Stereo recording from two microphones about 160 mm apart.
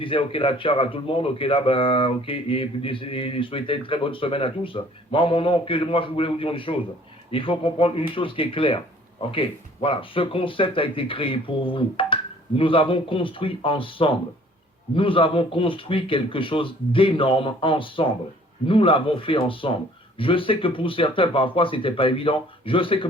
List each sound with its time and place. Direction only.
0.0 s speech: 35° left (ahead or behind)